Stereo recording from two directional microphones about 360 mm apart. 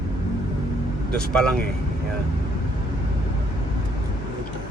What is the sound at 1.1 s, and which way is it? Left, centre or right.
Speech, centre.